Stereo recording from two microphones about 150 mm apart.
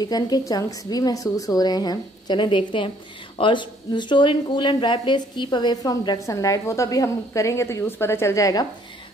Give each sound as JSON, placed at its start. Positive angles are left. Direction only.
{"t": 0.0, "sound": "a woman's voice", "side_deg": 25}